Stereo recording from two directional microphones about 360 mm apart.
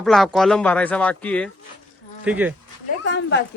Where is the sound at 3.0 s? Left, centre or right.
Left.